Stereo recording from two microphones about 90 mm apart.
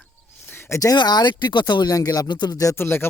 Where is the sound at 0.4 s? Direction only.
25° left (ahead or behind).